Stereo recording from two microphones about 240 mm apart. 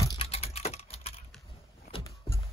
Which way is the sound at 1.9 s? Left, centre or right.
Centre.